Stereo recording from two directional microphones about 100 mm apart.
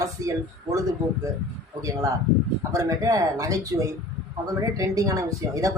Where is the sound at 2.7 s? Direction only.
35° right (ahead or behind).